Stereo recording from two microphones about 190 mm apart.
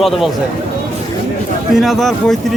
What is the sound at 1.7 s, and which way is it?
Speech, centre (ahead or behind).